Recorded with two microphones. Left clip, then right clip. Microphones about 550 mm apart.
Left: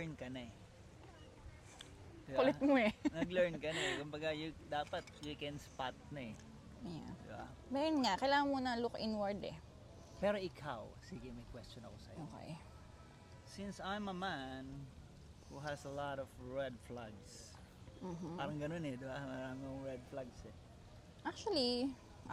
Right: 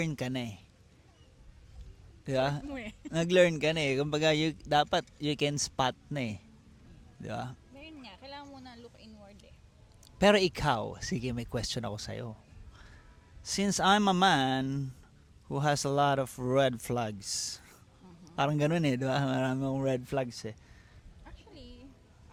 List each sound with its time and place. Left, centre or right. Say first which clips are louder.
0.0 s a man's voice: right 13 dB; right
2.6 s speech: left 9 dB; left
3.2 s a man's voice: right 15 dB; right
7.8 s speech: left 15 dB; left
10.2 s speech: right 14 dB; right
13.5 s a man's voice: right 19 dB; right
21.2 s speech: left 16 dB; left